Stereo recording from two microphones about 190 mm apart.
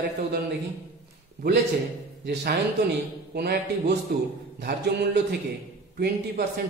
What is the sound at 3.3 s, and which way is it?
Speech, 55° right (ahead or behind).